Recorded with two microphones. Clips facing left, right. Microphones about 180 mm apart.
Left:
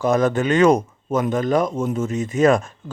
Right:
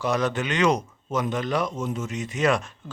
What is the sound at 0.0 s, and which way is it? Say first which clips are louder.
A man's voice: left 7 dB; 50° left (ahead or behind).